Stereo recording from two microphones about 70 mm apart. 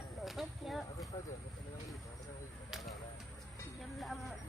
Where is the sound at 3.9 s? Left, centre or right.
Centre.